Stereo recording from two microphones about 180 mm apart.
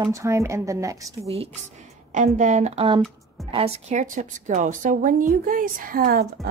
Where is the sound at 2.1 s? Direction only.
45° right (ahead or behind).